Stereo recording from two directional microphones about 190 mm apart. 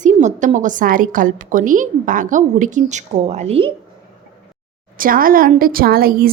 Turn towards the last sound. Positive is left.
turn(degrees=-50)  # may be behind; listen again after turning